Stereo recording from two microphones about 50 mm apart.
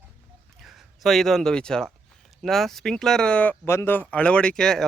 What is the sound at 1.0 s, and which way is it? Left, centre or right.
Speech, centre.